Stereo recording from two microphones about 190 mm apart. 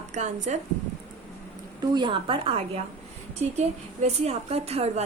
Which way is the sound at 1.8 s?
20° right (ahead or behind).